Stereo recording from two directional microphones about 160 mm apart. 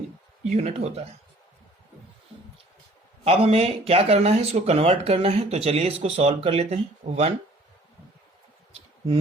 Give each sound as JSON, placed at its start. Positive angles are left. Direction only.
{"t": 0.4, "sound": "speech", "side_deg": -45}
{"t": 3.2, "sound": "speech", "side_deg": -40}